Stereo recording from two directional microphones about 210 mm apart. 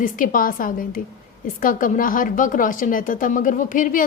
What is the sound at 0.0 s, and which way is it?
A woman's voice, 40° left (ahead or behind).